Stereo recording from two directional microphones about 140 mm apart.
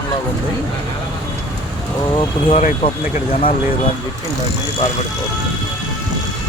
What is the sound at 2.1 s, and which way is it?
Speech, 40° left (ahead or behind).